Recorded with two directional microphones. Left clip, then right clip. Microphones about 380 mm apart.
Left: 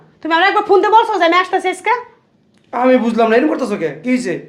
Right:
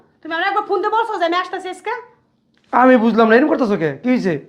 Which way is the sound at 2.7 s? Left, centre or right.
Right.